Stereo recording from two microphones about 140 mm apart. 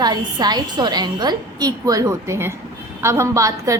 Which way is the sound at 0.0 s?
30° right (ahead or behind).